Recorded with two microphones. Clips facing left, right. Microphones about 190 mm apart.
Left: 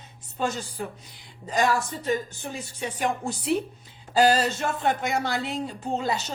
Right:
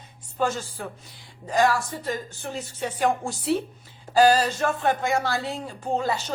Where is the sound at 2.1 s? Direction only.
10° left (ahead or behind).